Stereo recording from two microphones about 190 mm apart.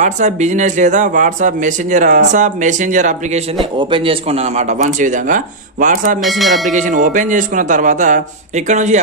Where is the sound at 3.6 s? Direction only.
25° right (ahead or behind); by 6.2 s 45° right (ahead or behind).